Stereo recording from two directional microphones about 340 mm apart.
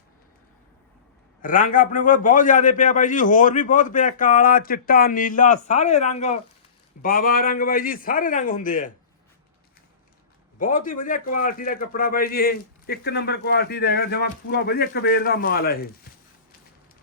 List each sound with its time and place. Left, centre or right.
1.4 s a man's voice: left
10.6 s a man's voice: left